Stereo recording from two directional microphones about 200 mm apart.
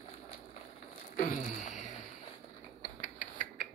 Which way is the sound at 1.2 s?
40° left (ahead or behind).